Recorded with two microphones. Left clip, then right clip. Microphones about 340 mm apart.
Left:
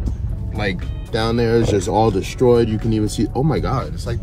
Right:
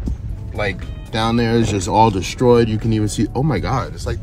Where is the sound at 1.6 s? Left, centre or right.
Right.